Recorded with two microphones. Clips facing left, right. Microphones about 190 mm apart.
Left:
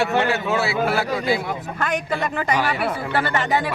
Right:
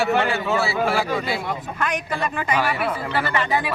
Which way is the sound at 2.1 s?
20° left (ahead or behind).